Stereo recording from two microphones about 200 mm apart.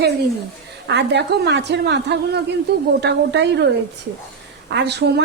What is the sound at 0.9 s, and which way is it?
A woman's voice, 60° right (ahead or behind).